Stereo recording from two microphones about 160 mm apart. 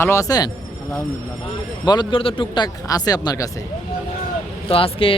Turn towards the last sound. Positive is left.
turn(degrees=35)  # may be behind; listen again after turning